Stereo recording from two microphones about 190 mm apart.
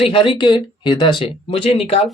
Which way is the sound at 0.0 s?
25° left (ahead or behind).